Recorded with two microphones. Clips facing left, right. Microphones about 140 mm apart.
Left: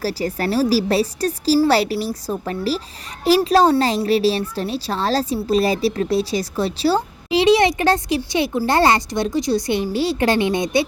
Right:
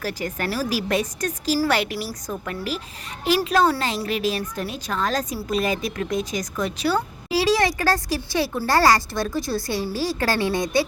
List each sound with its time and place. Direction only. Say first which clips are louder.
0.0 s a woman's voice: left 5 dB; 35° left (ahead or behind)